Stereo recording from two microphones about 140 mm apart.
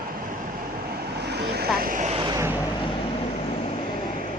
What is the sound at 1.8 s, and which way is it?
Speech, 70° right (ahead or behind).